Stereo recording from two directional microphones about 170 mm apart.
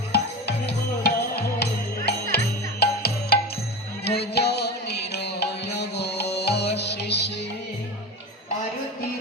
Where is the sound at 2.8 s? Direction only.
70° left (ahead or behind).